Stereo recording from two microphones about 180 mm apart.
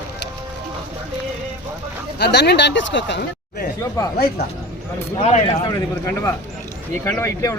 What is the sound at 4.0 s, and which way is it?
Speech, 15° left (ahead or behind).